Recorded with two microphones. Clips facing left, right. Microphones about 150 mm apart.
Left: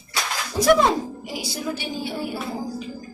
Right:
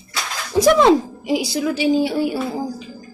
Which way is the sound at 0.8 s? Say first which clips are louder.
Right 7 dB; 90° right.